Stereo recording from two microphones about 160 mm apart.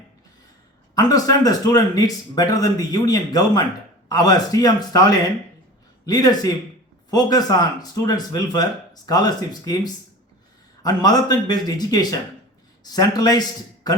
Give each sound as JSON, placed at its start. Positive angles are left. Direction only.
{"t": 0.9, "sound": "speech", "side_deg": 25}